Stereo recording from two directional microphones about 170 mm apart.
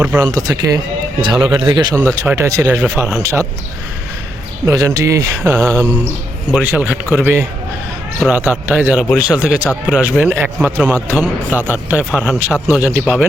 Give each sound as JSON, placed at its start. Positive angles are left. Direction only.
{"t": 0.0, "sound": "speech", "side_deg": -15}
{"t": 2.0, "sound": "speech", "side_deg": -15}
{"t": 4.6, "sound": "speech", "side_deg": -20}